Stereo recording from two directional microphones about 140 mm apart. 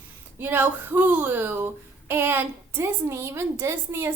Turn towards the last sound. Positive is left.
turn(degrees=-20)  # may be behind; listen again after turning